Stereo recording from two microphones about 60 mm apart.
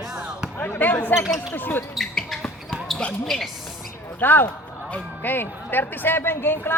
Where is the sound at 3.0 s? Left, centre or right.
Centre.